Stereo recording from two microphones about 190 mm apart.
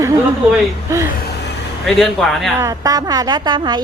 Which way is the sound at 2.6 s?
20° right (ahead or behind).